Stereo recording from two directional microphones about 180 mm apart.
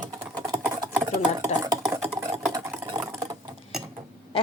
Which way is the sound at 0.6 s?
15° right (ahead or behind).